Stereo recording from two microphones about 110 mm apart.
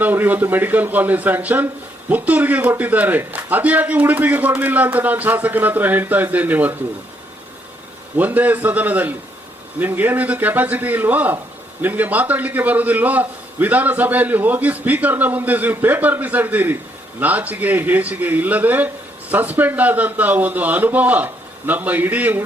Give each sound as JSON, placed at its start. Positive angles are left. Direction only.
{"t": 0.0, "sound": "a man's voice", "side_deg": -15}
{"t": 8.1, "sound": "a man's voice", "side_deg": -15}